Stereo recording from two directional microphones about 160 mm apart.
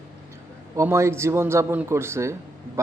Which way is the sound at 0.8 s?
15° right (ahead or behind).